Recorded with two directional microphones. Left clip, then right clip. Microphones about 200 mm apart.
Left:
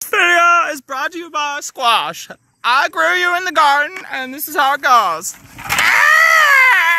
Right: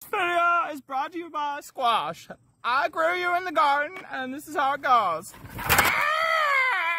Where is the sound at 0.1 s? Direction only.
10° left (ahead or behind); by 5.2 s 25° left (ahead or behind).